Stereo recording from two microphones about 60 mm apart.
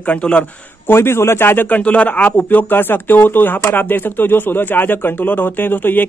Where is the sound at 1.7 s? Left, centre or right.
Left.